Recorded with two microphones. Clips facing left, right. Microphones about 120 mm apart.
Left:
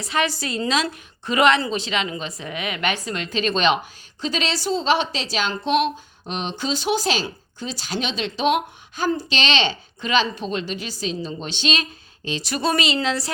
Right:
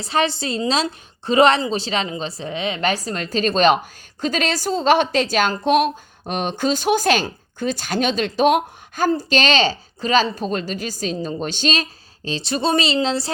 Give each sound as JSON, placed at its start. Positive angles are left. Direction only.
{"t": 0.0, "sound": "a woman's voice", "side_deg": -30}